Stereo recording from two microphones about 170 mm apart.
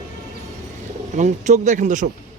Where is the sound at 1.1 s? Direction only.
45° right (ahead or behind).